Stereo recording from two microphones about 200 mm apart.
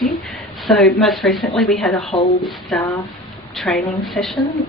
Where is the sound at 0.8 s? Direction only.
5° left (ahead or behind).